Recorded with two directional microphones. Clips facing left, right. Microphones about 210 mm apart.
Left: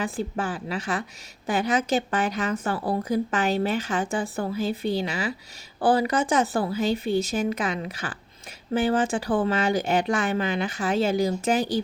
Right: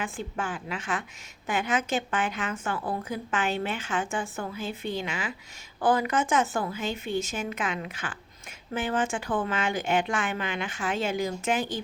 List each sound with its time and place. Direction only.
0.0 s a woman's voice: 35° left (ahead or behind)